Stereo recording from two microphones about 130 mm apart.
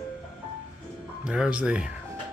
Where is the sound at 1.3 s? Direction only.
5° right (ahead or behind).